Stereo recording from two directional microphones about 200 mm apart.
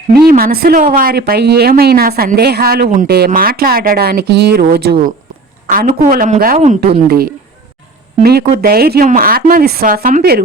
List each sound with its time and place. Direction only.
0.3 s speech: 50° right (ahead or behind)